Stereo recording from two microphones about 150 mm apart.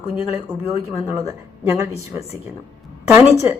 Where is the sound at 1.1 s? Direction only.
20° right (ahead or behind).